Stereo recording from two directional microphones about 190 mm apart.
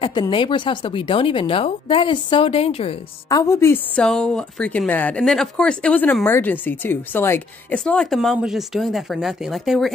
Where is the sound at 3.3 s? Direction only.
15° left (ahead or behind).